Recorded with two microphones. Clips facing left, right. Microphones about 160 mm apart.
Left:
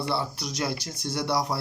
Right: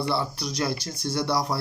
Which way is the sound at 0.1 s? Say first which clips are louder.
Right 2 dB; 20° left (ahead or behind).